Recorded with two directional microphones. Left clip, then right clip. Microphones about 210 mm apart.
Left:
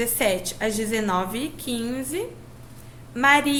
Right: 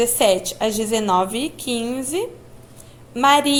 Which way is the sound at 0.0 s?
25° right (ahead or behind).